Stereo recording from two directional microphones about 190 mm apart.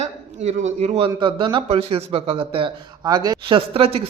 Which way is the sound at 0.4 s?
35° right (ahead or behind).